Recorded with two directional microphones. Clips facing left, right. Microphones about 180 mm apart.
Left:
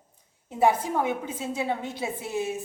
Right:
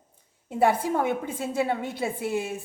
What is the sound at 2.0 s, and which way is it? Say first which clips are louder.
Speech: right 2 dB; 55° right (ahead or behind).